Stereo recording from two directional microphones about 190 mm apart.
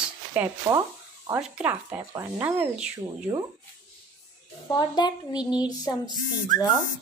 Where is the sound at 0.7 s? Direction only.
15° right (ahead or behind).